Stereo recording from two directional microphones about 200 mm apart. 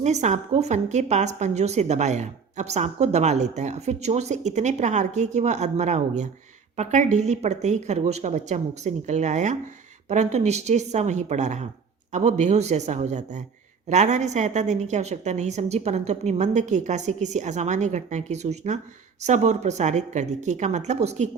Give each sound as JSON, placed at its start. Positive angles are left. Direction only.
{"t": 0.0, "sound": "a woman's voice", "side_deg": -35}